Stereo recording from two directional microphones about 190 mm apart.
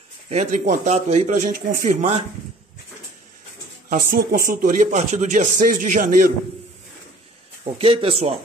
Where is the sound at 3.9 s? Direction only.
45° right (ahead or behind).